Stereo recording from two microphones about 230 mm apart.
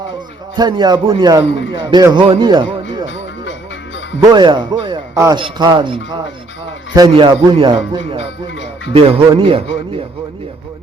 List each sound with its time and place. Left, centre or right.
0.5 s a man's voice: centre
4.2 s a man's voice: centre